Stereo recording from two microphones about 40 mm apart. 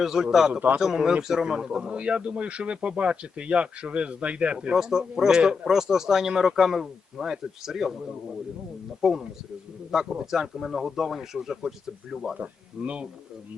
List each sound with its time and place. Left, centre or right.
0.0 s a man's voice: centre; by 4.7 s right
4.7 s speech: centre
9.0 s speech: centre
12.4 s a man's voice: right